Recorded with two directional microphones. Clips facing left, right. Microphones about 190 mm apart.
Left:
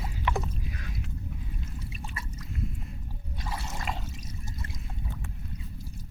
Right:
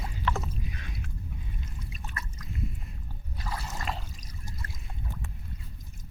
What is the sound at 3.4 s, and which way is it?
Drip, centre (ahead or behind).